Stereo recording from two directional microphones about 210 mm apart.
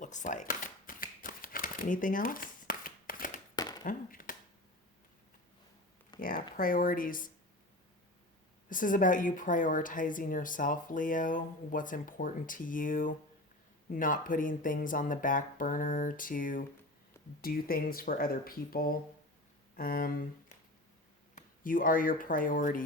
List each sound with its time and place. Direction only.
0.0 s shuffling cards: 35° left (ahead or behind)
3.5 s a sound: 20° left (ahead or behind)
3.8 s a sound: 40° left (ahead or behind)
6.1 s speech: 45° left (ahead or behind)
8.7 s speech: 40° left (ahead or behind)
21.3 s speech: 40° left (ahead or behind)